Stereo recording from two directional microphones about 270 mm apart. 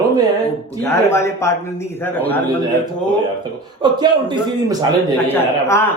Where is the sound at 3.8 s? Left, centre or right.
Centre.